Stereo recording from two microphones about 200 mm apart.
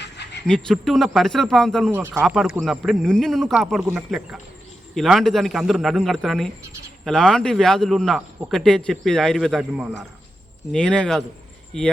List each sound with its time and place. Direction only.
0.0 s a sound: 60° left (ahead or behind)
0.4 s a man's voice: 5° left (ahead or behind)
1.9 s speech: 10° right (ahead or behind)
2.2 s a man's voice: centre (ahead or behind)
10.7 s a man's voice: 5° left (ahead or behind)